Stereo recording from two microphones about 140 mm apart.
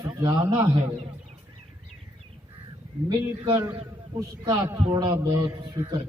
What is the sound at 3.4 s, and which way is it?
A man's voice, 35° right (ahead or behind).